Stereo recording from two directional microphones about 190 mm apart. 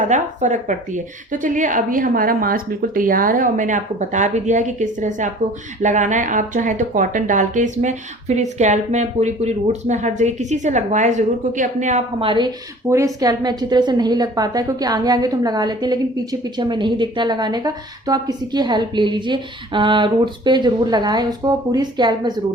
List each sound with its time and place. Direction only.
0.0 s a woman's voice: 40° right (ahead or behind)
12.9 s a woman's voice: 15° right (ahead or behind)